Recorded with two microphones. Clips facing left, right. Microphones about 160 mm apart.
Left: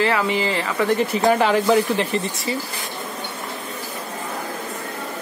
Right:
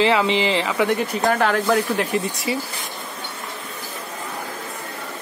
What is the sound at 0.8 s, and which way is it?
Speech, 5° left (ahead or behind).